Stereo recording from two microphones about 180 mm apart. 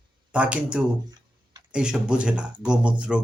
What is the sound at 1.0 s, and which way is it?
Tick-tock, 20° right (ahead or behind).